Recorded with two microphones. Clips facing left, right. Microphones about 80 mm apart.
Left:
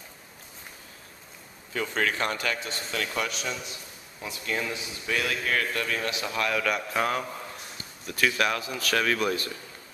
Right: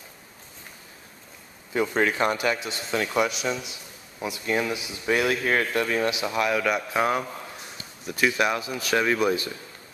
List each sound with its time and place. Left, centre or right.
1.7 s speech: centre
6.1 s speech: centre